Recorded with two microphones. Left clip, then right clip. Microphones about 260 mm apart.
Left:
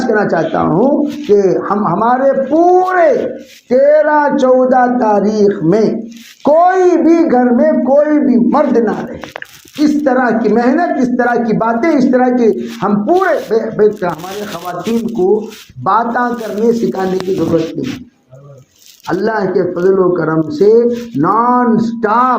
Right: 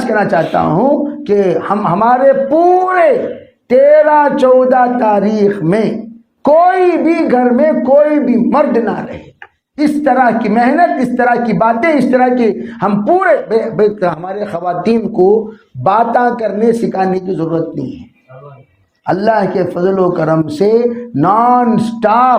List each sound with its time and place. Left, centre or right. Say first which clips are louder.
0.1 s a man's voice: right 2 dB; right
15.8 s a man's voice: right 2 dB; right
19.0 s speech: right 3 dB; right